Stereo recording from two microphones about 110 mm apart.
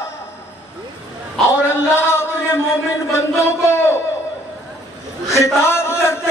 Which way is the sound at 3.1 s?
25° left (ahead or behind).